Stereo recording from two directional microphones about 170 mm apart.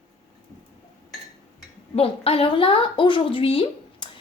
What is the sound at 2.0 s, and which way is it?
A woman's voice, 35° left (ahead or behind).